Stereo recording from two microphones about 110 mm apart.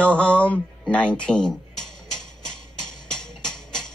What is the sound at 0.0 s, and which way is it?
Speech, 10° left (ahead or behind).